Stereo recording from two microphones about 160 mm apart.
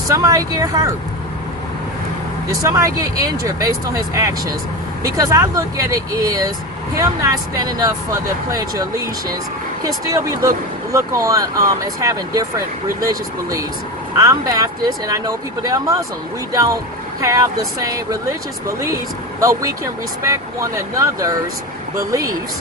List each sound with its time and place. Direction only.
0.1 s speech: 20° right (ahead or behind)
2.5 s speech: 20° right (ahead or behind)
19.4 s speech: 20° right (ahead or behind)